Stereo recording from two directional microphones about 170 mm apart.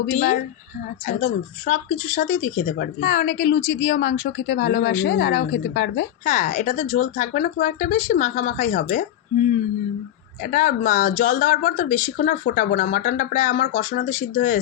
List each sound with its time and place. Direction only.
0.1 s a woman's voice: 55° left (ahead or behind); by 6.1 s 90° left
6.2 s speech: 50° left (ahead or behind)
10.4 s speech: 50° left (ahead or behind)